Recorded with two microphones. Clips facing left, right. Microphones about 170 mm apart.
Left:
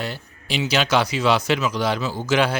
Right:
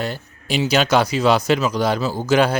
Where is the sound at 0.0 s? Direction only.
45° right (ahead or behind).